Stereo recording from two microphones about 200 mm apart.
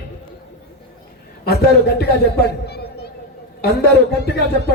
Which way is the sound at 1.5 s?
55° left (ahead or behind).